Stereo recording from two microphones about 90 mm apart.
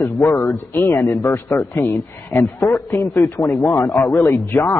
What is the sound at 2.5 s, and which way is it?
Speech, centre (ahead or behind).